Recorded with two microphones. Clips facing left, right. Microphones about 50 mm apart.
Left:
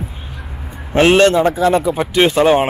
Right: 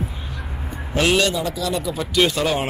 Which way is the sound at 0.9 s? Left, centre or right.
Left.